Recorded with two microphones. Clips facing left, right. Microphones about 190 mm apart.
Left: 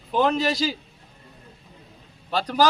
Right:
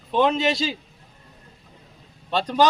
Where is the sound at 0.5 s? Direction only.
Centre (ahead or behind).